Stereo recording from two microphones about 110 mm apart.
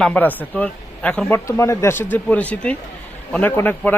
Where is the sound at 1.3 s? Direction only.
20° left (ahead or behind).